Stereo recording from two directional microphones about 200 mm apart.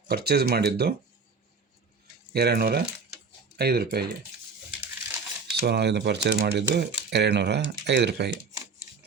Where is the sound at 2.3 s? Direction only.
55° right (ahead or behind).